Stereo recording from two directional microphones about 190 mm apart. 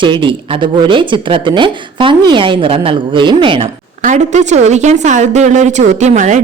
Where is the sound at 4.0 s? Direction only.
40° right (ahead or behind).